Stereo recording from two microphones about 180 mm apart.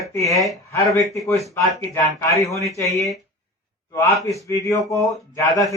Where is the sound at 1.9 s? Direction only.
15° left (ahead or behind).